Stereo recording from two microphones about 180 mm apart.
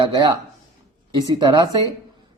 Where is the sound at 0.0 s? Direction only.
25° right (ahead or behind).